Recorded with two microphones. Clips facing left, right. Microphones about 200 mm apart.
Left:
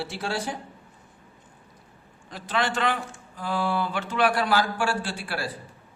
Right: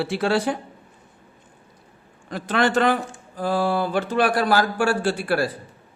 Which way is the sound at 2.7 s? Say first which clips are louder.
Right 7 dB; 40° right (ahead or behind).